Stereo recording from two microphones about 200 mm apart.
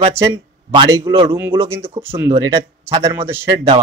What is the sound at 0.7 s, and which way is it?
Speech, 15° right (ahead or behind).